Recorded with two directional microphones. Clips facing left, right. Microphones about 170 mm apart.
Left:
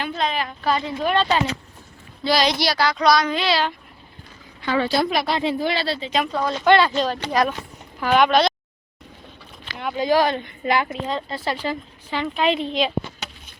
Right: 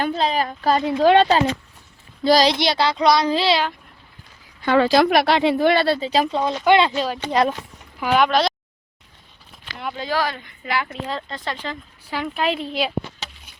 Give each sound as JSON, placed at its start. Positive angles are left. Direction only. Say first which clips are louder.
{"t": 0.2, "sound": "a woman's voice", "louder": "right 3 dB", "side_deg": -35}
{"t": 0.9, "sound": "a woman's voice", "louder": "right 7 dB", "side_deg": -80}
{"t": 2.2, "sound": "a woman's voice", "louder": "right 4 dB", "side_deg": -40}
{"t": 2.5, "sound": "a child's voice", "louder": "right 2 dB", "side_deg": -25}
{"t": 4.8, "sound": "speech", "louder": "right 6 dB", "side_deg": -90}
{"t": 6.0, "sound": "a woman's voice", "louder": "right 3 dB", "side_deg": -35}
{"t": 6.3, "sound": "a child's voice", "louder": "left 1 dB", "side_deg": -15}
{"t": 7.3, "sound": "a child's voice", "louder": "right 4 dB", "side_deg": -25}
{"t": 8.1, "sound": "a woman's voice", "louder": "left 1 dB", "side_deg": 0}
{"t": 10.0, "sound": "a woman's voice", "louder": "left 6 dB", "side_deg": 15}
{"t": 11.0, "sound": "speech", "louder": "left 3 dB", "side_deg": 5}
{"t": 12.1, "sound": "a woman's voice", "louder": "left 2 dB", "side_deg": -5}